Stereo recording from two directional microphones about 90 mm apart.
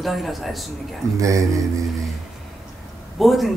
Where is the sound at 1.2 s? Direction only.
35° right (ahead or behind).